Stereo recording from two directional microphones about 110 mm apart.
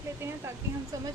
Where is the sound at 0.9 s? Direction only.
30° right (ahead or behind).